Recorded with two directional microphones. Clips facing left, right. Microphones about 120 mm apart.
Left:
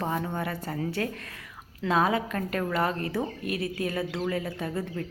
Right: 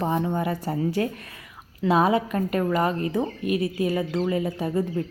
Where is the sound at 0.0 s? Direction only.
20° right (ahead or behind).